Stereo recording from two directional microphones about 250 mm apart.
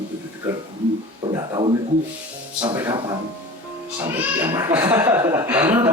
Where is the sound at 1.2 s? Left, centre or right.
Centre.